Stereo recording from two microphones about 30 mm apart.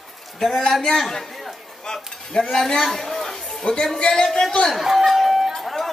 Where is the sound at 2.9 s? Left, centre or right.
Centre.